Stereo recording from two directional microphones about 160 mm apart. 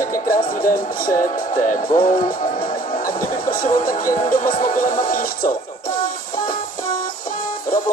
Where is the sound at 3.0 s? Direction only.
60° left (ahead or behind).